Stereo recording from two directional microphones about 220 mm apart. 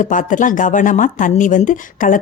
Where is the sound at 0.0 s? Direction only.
35° left (ahead or behind).